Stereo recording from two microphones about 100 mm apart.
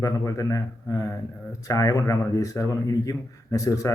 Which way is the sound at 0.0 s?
35° left (ahead or behind).